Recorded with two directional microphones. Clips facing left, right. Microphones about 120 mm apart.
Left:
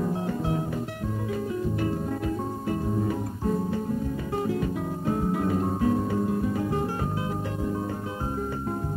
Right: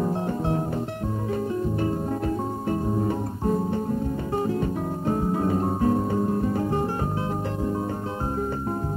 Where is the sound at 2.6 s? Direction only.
35° right (ahead or behind).